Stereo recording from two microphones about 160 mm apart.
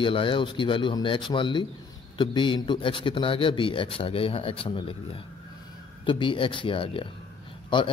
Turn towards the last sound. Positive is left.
turn(degrees=30)  # may be behind; listen again after turning